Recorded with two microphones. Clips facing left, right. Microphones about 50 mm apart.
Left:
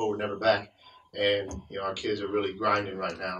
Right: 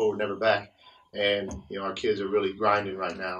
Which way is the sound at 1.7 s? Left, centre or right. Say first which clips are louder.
Right 4 dB; centre.